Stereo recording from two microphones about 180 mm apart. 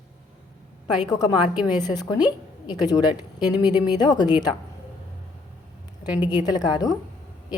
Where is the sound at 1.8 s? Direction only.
20° left (ahead or behind).